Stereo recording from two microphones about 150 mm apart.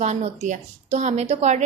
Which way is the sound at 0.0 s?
50° right (ahead or behind).